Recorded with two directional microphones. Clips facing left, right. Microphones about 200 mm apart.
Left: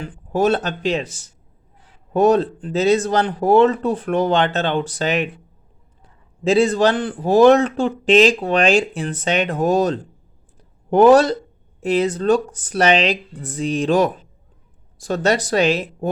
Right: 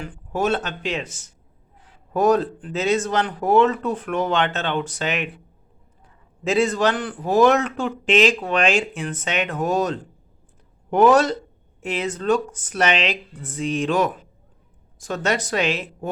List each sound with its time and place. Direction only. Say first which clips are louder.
0.0 s speech: left 5 dB; 35° left (ahead or behind)
6.4 s speech: left 4 dB; 30° left (ahead or behind)